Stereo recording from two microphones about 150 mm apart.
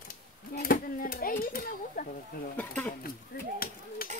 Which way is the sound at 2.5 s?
10° left (ahead or behind).